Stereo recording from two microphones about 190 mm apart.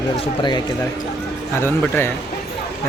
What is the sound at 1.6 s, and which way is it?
Speech, 10° left (ahead or behind).